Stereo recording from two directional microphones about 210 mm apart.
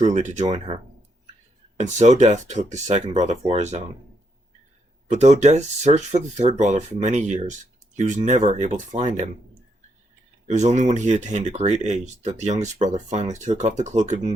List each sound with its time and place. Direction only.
0.0 s speech: 35° right (ahead or behind)
1.8 s speech: 35° right (ahead or behind)
5.1 s speech: 35° right (ahead or behind)
10.4 s speech: 35° right (ahead or behind)